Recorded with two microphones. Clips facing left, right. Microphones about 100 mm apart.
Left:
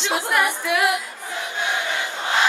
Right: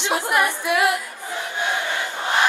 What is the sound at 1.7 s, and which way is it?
Crowd, 20° left (ahead or behind).